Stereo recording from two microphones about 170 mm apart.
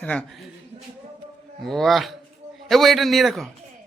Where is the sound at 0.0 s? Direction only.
5° left (ahead or behind).